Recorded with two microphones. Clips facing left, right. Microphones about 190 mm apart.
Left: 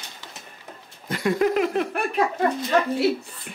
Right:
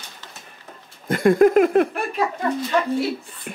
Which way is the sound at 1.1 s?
50° right (ahead or behind).